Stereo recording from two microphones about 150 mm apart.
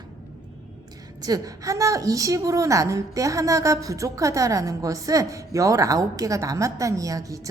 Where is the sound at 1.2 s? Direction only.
25° right (ahead or behind).